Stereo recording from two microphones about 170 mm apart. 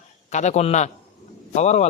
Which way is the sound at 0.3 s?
45° left (ahead or behind).